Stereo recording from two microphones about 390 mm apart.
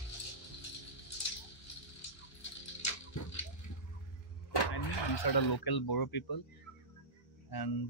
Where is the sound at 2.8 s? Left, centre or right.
Left.